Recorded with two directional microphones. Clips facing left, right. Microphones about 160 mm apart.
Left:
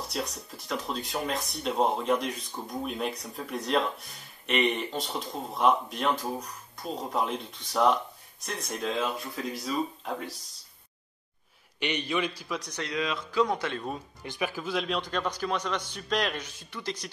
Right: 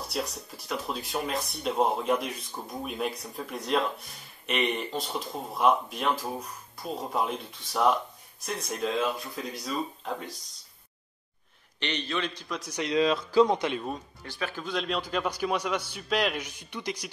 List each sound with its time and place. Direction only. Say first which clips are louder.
0.1 s speech: right 1 dB; centre (ahead or behind)
11.8 s a man's voice: left 2 dB; 10° left (ahead or behind)
12.5 s speech: right 1 dB; 5° right (ahead or behind)
12.8 s speech: right 9 dB; 30° right (ahead or behind)
13.5 s speech: right 3 dB; 20° right (ahead or behind)
14.2 s speech: left 4 dB; 20° left (ahead or behind)
14.5 s speech: right 2 dB; 5° left (ahead or behind)
16.4 s speech: right 1 dB; 15° right (ahead or behind)